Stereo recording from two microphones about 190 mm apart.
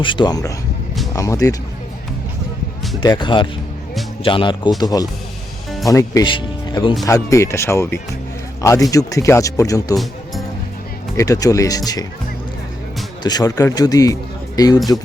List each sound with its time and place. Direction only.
0.0 s a man's voice: 25° left (ahead or behind)
3.0 s a man's voice: 25° left (ahead or behind)
9.9 s music: centre (ahead or behind)
11.2 s a man's voice: 15° left (ahead or behind)
13.2 s speech: 20° left (ahead or behind)